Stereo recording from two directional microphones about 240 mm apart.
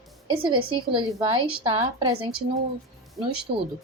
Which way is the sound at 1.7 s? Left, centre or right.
Right.